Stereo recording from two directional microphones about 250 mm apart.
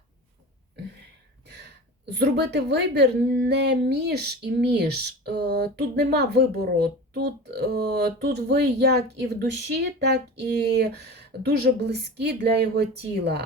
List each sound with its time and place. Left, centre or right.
2.1 s a woman's voice: right